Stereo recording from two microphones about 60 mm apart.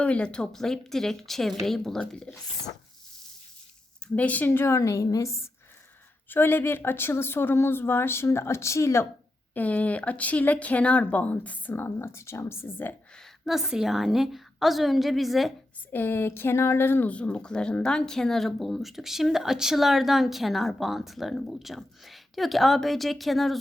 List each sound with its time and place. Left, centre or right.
0.0 s a woman's voice: centre
4.0 s speech: left
4.6 s a woman's voice: left
6.2 s speech: left
9.6 s speech: left
11.8 s speech: left
13.4 s speech: centre
15.9 s speech: left
17.1 s speech: left; by 23.6 s centre